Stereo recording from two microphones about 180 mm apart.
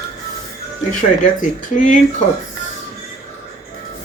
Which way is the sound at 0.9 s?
45° left (ahead or behind).